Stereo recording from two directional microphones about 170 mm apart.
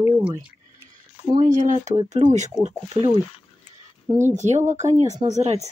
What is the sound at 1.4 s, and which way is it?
Speech, 45° right (ahead or behind).